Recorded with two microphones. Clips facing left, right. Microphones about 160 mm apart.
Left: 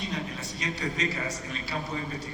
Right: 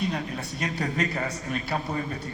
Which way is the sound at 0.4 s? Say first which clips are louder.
Right 3 dB; 55° right (ahead or behind).